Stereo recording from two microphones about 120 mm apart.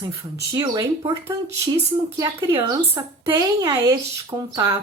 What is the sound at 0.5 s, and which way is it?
A woman's voice, 35° right (ahead or behind).